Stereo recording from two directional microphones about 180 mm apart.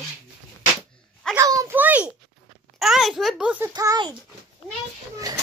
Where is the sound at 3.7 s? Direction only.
20° right (ahead or behind).